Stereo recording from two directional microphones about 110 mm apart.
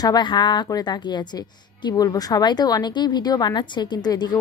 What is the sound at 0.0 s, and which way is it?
A woman's voice, 40° left (ahead or behind).